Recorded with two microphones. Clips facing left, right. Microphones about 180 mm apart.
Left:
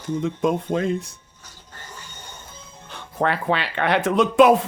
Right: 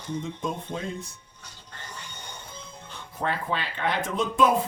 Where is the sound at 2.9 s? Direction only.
70° left (ahead or behind).